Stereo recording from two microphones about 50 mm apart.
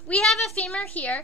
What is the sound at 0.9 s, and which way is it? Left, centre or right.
Speech, left.